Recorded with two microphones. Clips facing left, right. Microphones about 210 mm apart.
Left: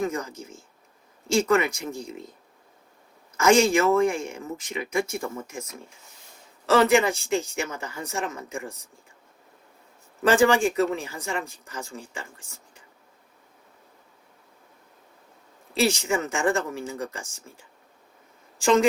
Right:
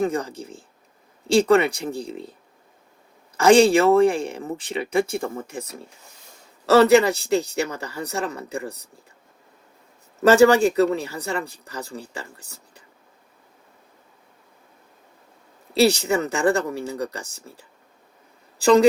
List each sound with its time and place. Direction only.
0.0 s speech: 35° right (ahead or behind)
3.3 s speech: 35° right (ahead or behind)
10.2 s speech: 40° right (ahead or behind)
15.7 s speech: 35° right (ahead or behind)